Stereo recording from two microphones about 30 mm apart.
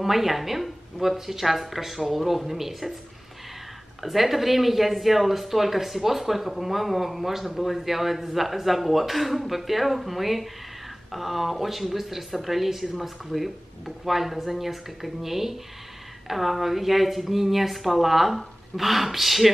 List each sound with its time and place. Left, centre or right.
0.0 s speech: centre
4.0 s speech: centre